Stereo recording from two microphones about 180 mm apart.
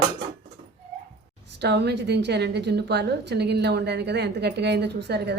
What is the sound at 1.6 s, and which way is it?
A woman's voice, 70° right (ahead or behind).